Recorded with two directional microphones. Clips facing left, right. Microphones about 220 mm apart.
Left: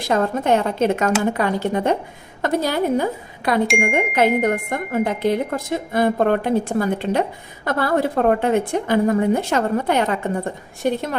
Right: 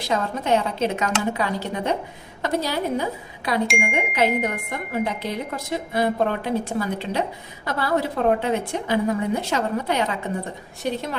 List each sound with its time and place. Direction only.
0.0 s speech: 50° left (ahead or behind)